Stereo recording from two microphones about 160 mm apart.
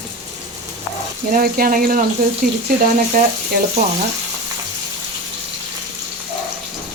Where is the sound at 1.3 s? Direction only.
65° right (ahead or behind).